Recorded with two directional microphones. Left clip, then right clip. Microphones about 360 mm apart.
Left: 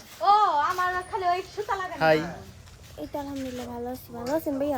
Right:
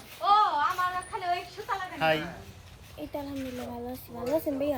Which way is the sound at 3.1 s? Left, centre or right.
Centre.